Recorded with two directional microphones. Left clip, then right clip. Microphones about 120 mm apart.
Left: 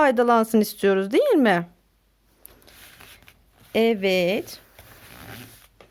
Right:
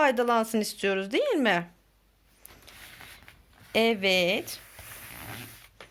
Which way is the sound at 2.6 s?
65° left (ahead or behind).